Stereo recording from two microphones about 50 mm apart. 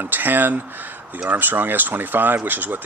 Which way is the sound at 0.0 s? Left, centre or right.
Right.